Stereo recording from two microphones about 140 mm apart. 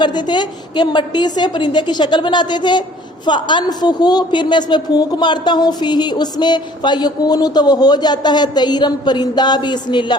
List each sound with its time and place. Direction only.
0.0 s a woman's voice: 30° left (ahead or behind)